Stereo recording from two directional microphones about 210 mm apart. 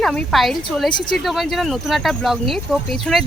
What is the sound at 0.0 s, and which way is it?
Speech, 5° left (ahead or behind).